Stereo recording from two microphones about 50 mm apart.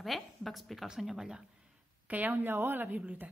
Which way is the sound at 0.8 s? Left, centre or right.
Centre.